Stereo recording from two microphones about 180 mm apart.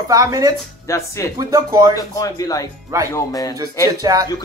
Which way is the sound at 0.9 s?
15° left (ahead or behind).